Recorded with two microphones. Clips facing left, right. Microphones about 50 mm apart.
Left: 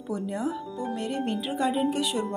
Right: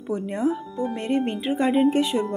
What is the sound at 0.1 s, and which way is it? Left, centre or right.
Music, right.